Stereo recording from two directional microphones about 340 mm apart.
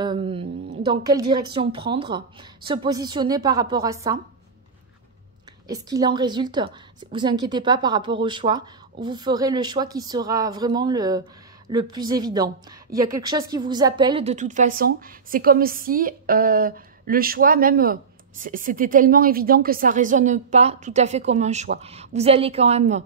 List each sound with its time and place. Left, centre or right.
0.0 s mantra: centre
0.8 s a woman's voice: centre
5.7 s a woman's voice: centre